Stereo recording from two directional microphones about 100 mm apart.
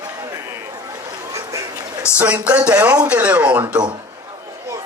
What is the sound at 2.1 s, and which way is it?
Speech, 15° right (ahead or behind).